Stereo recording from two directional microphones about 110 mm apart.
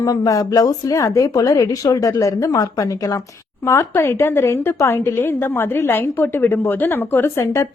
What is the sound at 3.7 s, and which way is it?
A woman's voice, 25° left (ahead or behind).